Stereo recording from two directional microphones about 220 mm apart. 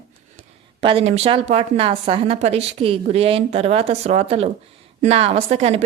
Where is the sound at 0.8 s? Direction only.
25° right (ahead or behind).